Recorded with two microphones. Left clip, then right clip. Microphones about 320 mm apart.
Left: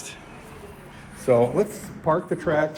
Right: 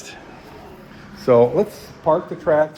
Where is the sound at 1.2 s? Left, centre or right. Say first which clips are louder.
Right 5 dB; right.